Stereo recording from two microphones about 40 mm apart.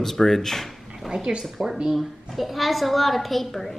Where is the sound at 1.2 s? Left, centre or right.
Centre.